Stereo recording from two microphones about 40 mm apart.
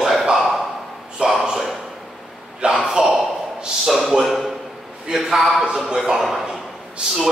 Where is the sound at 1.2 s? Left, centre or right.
Right.